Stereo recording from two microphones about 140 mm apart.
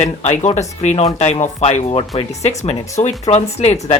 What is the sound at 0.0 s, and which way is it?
Speech, 50° left (ahead or behind).